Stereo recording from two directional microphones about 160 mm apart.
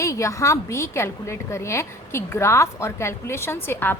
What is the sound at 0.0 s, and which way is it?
A woman's voice, 20° left (ahead or behind).